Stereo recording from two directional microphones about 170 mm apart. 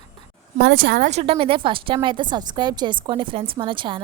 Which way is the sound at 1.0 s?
40° right (ahead or behind).